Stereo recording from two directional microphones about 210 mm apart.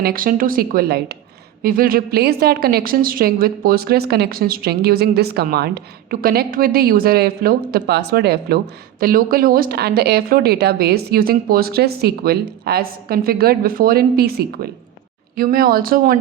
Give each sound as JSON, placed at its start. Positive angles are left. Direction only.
{"t": 0.0, "sound": "a woman's voice", "side_deg": -45}